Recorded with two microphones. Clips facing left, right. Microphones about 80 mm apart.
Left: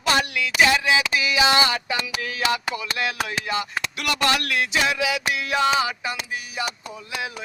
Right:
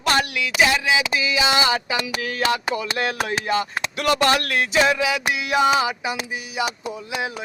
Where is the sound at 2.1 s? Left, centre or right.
Right.